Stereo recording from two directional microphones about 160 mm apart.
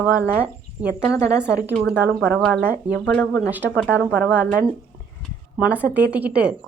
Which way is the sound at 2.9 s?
10° left (ahead or behind).